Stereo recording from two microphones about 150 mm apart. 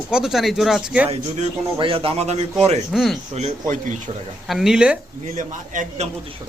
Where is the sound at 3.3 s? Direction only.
50° right (ahead or behind).